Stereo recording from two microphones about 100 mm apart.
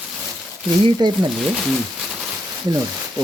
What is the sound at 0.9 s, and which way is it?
Speech, 45° right (ahead or behind).